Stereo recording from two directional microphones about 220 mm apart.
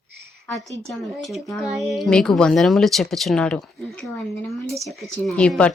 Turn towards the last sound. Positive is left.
turn(degrees=5)  # may be behind; listen again after turning